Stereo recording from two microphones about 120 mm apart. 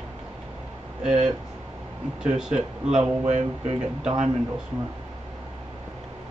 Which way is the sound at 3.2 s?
75° right (ahead or behind).